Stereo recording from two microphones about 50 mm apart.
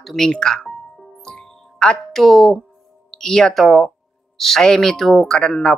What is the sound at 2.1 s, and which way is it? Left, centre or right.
Speech, centre.